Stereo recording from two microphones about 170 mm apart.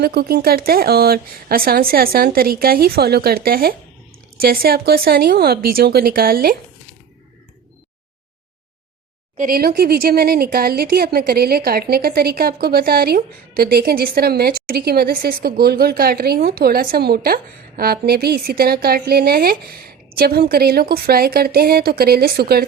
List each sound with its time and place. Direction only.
0.0 s speech: 70° right (ahead or behind)
9.4 s speech: 60° right (ahead or behind)